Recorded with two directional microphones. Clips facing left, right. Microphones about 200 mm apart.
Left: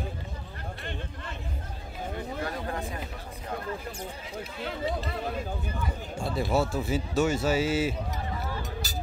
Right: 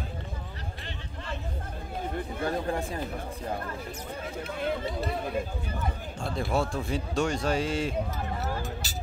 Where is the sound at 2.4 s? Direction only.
30° right (ahead or behind).